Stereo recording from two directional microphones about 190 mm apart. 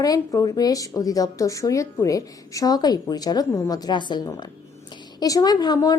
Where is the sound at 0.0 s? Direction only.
20° left (ahead or behind).